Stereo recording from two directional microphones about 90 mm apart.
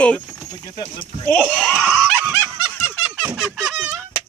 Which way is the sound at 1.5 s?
15° left (ahead or behind).